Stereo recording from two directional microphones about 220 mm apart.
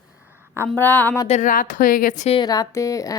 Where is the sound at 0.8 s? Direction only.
10° left (ahead or behind).